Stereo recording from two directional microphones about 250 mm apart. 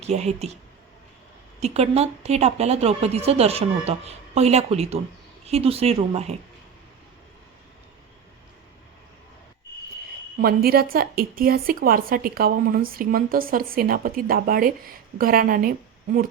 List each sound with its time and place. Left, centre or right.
0.0 s a woman's voice: right
1.6 s a woman's voice: right
10.4 s a woman's voice: right